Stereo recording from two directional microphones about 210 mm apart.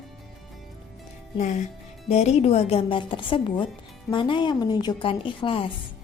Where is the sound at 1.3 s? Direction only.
35° left (ahead or behind).